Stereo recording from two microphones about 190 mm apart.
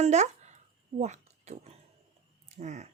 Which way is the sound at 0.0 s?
35° right (ahead or behind).